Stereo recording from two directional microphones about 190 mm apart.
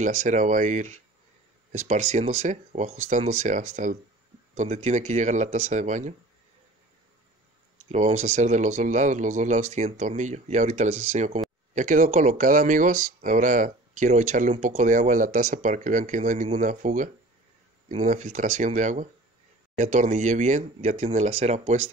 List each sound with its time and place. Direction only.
0.0 s speech: 40° right (ahead or behind)
7.9 s speech: 40° right (ahead or behind)